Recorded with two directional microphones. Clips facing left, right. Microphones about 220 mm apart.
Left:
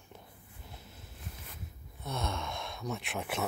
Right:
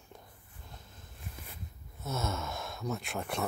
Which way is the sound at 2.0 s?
Centre (ahead or behind).